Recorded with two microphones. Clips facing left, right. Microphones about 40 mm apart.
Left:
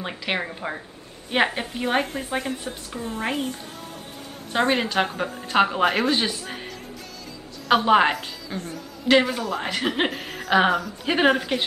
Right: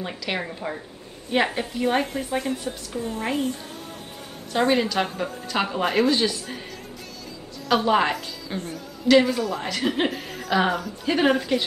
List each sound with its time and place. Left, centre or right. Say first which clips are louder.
0.4 s a woman's voice: left 1 dB; centre
4.5 s speech: right 1 dB; left
7.6 s speech: left 3 dB; left
8.5 s speech: right 1 dB; right
9.1 s speech: right 1 dB; centre
10.1 s chuckle: even; centre
10.5 s speech: left 3 dB; centre